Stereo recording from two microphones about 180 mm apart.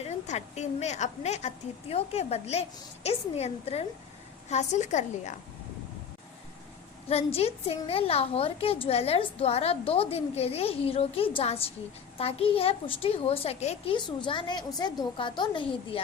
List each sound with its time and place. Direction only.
0.0 s a woman's voice: 40° left (ahead or behind)
7.1 s a woman's voice: 35° left (ahead or behind)